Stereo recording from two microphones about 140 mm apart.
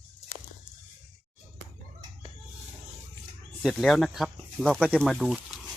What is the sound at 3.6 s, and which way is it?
Speech, centre (ahead or behind).